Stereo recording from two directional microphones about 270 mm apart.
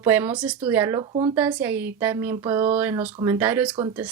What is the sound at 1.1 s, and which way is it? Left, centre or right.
Speech, right.